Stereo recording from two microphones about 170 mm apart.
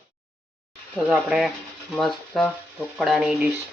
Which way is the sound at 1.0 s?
5° right (ahead or behind).